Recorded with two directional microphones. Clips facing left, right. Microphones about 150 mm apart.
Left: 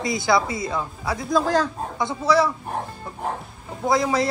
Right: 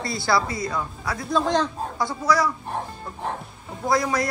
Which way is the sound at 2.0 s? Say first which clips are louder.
Left 3 dB; 25° left (ahead or behind).